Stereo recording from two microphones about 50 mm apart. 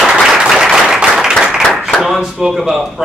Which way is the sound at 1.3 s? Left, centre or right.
Centre.